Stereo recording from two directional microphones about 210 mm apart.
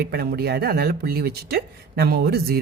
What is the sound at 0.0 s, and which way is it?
Speech, 50° right (ahead or behind).